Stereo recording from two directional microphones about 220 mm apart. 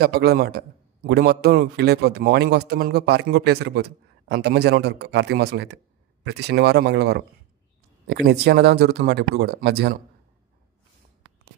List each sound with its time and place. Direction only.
0.0 s a man's voice: 45° right (ahead or behind)